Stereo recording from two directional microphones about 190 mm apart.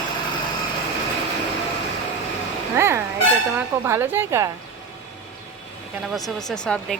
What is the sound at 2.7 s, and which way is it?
A woman's voice, 15° right (ahead or behind).